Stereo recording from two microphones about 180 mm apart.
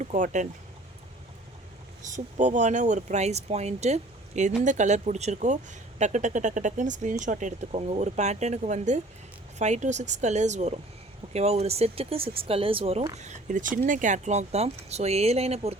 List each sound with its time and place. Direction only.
0.0 s speech: 45° right (ahead or behind)
2.0 s speech: 45° right (ahead or behind)